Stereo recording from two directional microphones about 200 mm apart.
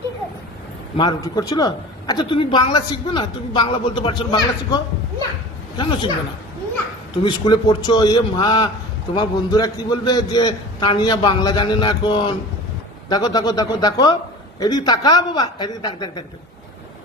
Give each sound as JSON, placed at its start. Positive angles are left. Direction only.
{"t": 0.9, "sound": "a woman's voice", "side_deg": 20}
{"t": 7.2, "sound": "a woman's voice", "side_deg": 25}